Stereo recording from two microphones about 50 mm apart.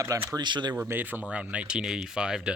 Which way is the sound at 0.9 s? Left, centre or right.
Right.